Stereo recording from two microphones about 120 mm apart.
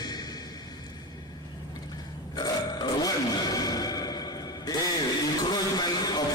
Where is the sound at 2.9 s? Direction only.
30° left (ahead or behind).